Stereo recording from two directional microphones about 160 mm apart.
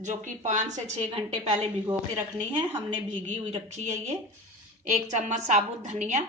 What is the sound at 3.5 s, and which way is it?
A woman's voice, 45° right (ahead or behind).